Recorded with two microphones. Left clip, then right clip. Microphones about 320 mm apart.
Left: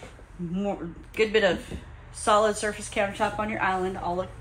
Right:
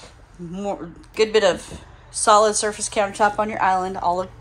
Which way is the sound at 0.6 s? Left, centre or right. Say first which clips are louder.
Right 4 dB; centre.